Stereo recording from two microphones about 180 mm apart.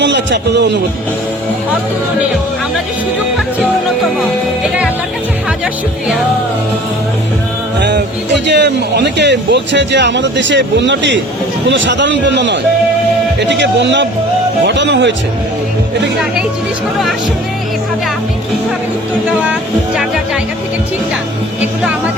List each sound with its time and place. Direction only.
0.0 s speech: 75° right (ahead or behind)
7.8 s music: 70° right (ahead or behind)
8.4 s a man's voice: 70° right (ahead or behind); by 15.1 s 85° right